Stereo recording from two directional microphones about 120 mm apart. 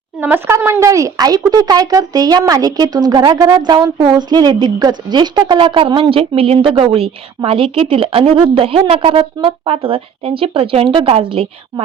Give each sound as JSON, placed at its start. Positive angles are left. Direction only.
{"t": 0.2, "sound": "a woman's voice", "side_deg": -20}